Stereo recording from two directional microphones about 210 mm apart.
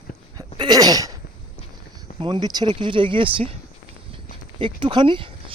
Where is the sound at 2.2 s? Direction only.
20° right (ahead or behind).